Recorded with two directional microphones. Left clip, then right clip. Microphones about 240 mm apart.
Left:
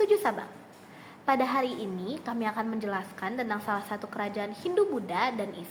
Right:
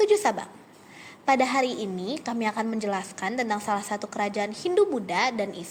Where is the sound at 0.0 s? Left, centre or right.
Right.